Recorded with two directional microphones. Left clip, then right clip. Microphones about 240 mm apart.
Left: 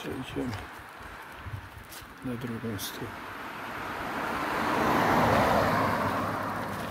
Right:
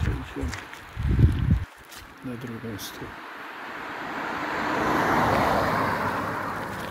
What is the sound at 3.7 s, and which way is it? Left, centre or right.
Waves, left.